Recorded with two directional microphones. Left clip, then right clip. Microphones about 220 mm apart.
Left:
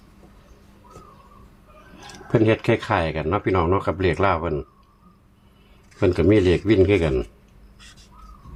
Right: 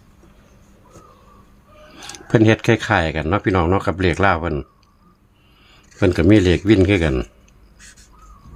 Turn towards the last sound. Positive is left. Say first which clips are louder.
# right 1 dB
turn(degrees=-40)  # may be behind; listen again after turning